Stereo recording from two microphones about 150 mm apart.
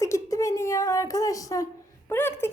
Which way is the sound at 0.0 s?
20° left (ahead or behind).